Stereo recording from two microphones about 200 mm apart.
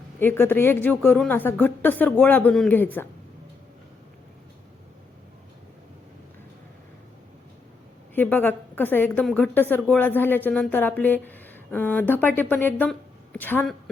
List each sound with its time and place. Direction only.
0.2 s a woman's voice: 10° left (ahead or behind)
8.1 s a woman's voice: 10° left (ahead or behind)